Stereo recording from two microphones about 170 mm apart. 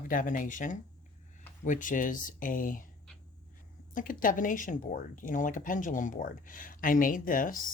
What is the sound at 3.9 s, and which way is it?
Speech, 50° left (ahead or behind).